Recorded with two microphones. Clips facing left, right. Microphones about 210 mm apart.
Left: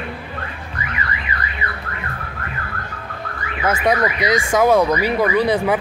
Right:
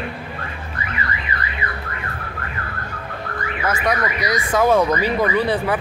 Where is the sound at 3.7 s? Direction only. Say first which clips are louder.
Left 4 dB; 25° left (ahead or behind).